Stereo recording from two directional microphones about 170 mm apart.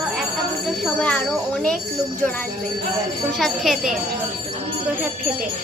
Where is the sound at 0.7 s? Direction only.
5° left (ahead or behind).